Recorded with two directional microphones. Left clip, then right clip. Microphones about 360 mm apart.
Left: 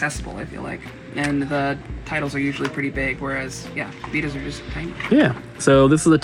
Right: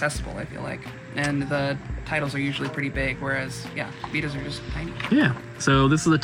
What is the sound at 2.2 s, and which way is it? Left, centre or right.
Speech, centre.